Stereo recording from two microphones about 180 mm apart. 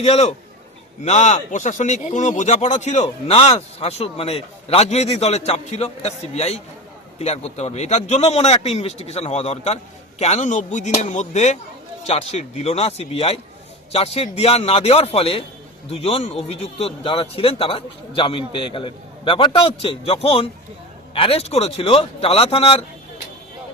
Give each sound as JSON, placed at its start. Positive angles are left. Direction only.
{"t": 0.0, "sound": "speech", "side_deg": 35}